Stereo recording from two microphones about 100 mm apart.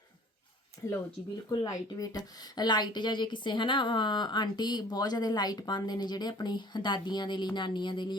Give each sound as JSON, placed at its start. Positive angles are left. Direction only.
{"t": 1.5, "sound": "speech", "side_deg": 35}